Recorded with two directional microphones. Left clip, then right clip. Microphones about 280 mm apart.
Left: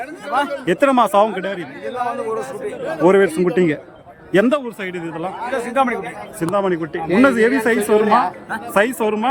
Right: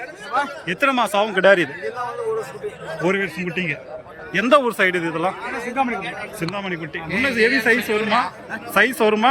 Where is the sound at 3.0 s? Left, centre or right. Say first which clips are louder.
Left 8 dB; centre.